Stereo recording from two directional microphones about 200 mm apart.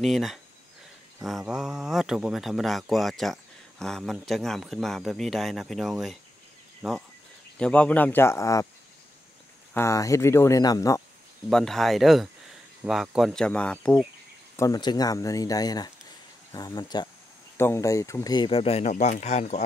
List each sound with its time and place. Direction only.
0.0 s a man's voice: centre (ahead or behind); by 8.6 s 15° left (ahead or behind)
9.8 s speech: 15° left (ahead or behind)
11.5 s speech: centre (ahead or behind)
14.6 s speech: 20° left (ahead or behind)